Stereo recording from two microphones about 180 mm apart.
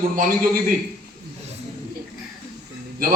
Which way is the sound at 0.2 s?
50° right (ahead or behind).